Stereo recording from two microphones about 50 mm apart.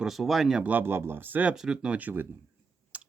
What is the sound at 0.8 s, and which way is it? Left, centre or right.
Speech, right.